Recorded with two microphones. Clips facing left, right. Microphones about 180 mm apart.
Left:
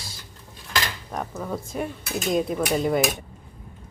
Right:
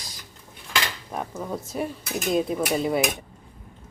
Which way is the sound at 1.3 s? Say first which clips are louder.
Left 1 dB; 5° right (ahead or behind).